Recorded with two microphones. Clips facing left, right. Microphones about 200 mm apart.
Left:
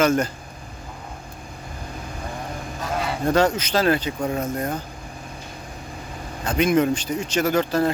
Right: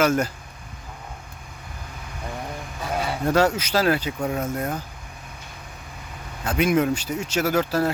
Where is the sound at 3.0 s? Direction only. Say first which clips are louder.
Left 1 dB; 5° right (ahead or behind).